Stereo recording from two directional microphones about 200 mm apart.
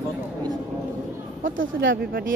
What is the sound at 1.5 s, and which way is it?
Speech, 75° right (ahead or behind).